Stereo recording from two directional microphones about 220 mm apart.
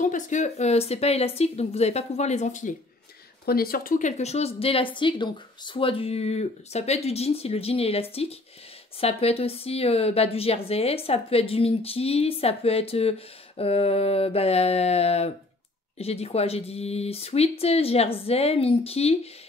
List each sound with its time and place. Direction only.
0.0 s speech: 35° left (ahead or behind)